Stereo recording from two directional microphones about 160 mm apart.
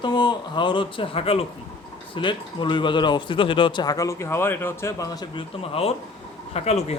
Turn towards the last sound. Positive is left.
turn(degrees=40)  # may be behind; listen again after turning